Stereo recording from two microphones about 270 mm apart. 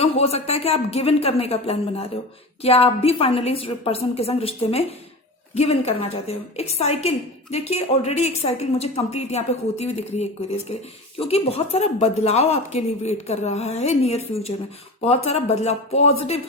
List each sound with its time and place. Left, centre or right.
0.0 s a woman's voice: left